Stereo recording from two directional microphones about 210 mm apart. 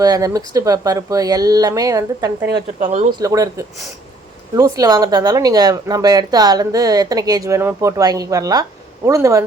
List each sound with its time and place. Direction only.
0.0 s speech: 15° right (ahead or behind)
2.5 s a woman's voice: 50° right (ahead or behind)
2.8 s speech: 35° right (ahead or behind)
3.2 s speech: 15° right (ahead or behind)